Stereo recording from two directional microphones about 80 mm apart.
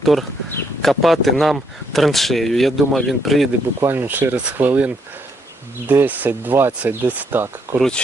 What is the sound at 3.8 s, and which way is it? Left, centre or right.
Speech, right.